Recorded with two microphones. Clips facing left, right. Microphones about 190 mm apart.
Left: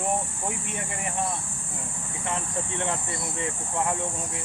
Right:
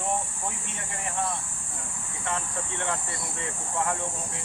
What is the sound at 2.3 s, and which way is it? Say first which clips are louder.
Speech: left 1 dB; 20° left (ahead or behind).